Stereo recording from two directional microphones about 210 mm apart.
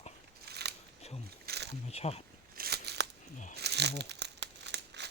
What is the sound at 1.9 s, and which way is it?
Speech, 30° left (ahead or behind).